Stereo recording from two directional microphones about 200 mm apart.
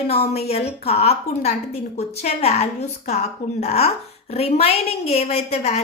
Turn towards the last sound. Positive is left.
turn(degrees=30)  # may be behind; listen again after turning